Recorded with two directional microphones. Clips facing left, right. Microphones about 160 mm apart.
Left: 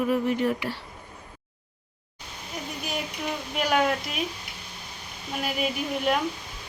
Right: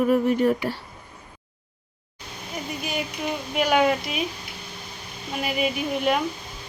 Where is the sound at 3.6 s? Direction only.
Centre (ahead or behind).